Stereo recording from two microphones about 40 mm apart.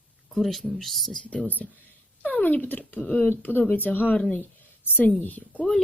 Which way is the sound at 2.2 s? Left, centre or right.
Left.